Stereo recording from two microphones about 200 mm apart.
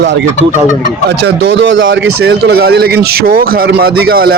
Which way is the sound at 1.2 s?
65° right (ahead or behind).